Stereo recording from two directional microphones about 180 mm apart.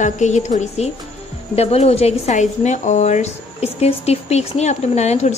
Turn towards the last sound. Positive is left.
turn(degrees=40)  # may be behind; listen again after turning